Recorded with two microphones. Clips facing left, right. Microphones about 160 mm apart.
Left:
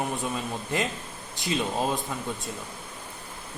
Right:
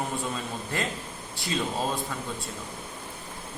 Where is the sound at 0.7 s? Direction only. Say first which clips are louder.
Left 3 dB; 20° left (ahead or behind).